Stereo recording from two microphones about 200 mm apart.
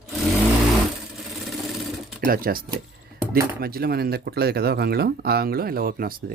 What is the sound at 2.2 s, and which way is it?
Speech, 45° right (ahead or behind).